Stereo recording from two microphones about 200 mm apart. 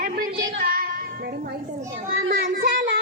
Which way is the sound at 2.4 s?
45° right (ahead or behind).